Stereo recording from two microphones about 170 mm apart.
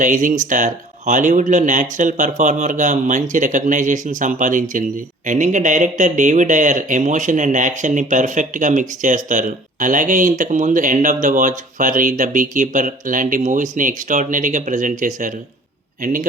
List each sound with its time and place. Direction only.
0.0 s a man's voice: 50° right (ahead or behind)